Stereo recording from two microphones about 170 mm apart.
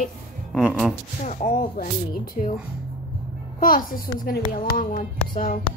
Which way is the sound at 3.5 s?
55° left (ahead or behind).